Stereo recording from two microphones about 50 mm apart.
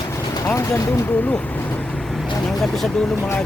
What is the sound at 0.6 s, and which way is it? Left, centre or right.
Speech, left.